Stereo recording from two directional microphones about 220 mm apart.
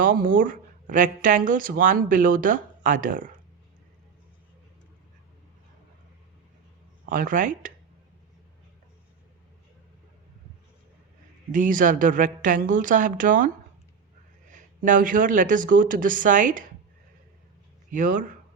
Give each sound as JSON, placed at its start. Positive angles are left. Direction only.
{"t": 0.0, "sound": "speech", "side_deg": -40}
{"t": 7.0, "sound": "speech", "side_deg": -40}
{"t": 11.5, "sound": "speech", "side_deg": -35}
{"t": 14.5, "sound": "speech", "side_deg": -35}
{"t": 17.9, "sound": "speech", "side_deg": -35}